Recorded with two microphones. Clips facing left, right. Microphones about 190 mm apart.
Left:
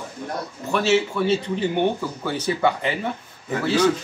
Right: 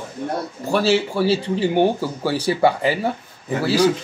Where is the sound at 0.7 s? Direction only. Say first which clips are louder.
Right 2 dB; 35° right (ahead or behind).